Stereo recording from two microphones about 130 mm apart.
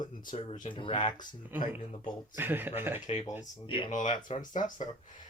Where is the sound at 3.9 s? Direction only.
75° left (ahead or behind).